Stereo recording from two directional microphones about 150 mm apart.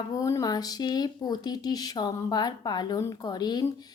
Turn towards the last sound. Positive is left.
turn(degrees=25)  # may be behind; listen again after turning